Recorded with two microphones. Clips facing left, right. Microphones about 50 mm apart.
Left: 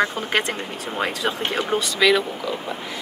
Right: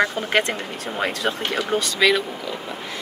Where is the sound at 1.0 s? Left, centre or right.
Centre.